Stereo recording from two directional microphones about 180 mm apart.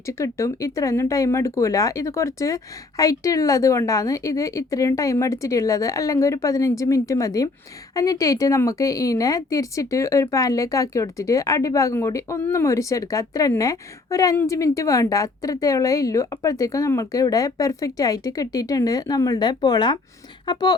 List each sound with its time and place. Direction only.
0.0 s a woman's voice: 15° left (ahead or behind)